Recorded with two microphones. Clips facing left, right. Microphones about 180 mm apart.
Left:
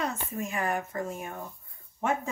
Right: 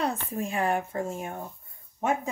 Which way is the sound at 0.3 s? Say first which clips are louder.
Right 3 dB; 30° right (ahead or behind).